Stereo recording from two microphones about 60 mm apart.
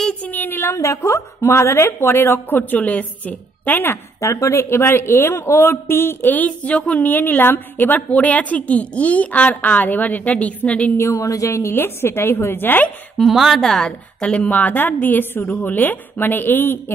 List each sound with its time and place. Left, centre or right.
0.2 s a sound: left
0.7 s a woman's voice: left
4.2 s a man's voice: left
11.0 s a woman's voice: left
11.7 s a woman's voice: left
13.2 s a woman's voice: centre
13.8 s a man's voice: centre; by 16.9 s left